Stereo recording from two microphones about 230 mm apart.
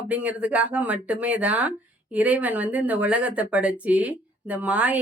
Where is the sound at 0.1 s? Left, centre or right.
Centre.